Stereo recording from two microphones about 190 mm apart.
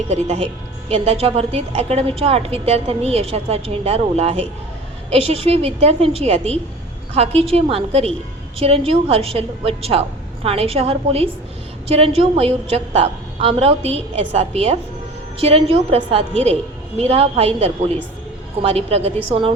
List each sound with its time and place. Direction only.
0.1 s a woman's voice: 35° right (ahead or behind)